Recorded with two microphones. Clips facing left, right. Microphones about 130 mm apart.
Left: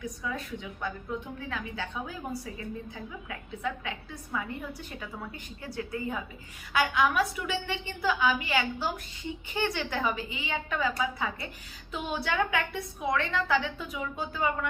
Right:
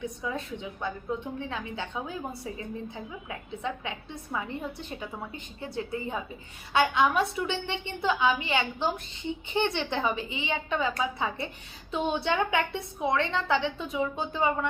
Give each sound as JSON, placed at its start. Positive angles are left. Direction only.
{"t": 0.0, "sound": "a woman's voice", "side_deg": -25}